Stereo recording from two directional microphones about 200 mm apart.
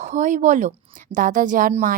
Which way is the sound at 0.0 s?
40° right (ahead or behind).